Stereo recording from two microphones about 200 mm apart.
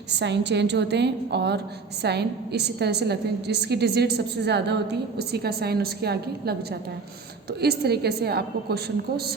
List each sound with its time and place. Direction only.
0.1 s a woman's voice: 60° right (ahead or behind)
7.6 s a woman's voice: 55° right (ahead or behind)